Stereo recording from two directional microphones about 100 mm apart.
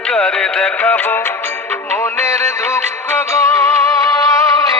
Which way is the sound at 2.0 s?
30° left (ahead or behind).